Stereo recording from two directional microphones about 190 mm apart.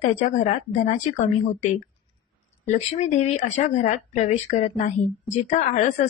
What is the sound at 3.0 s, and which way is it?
Speech, 35° left (ahead or behind).